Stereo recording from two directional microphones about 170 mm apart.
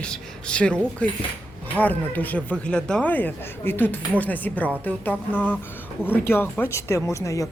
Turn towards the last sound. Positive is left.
turn(degrees=20)  # may be behind; listen again after turning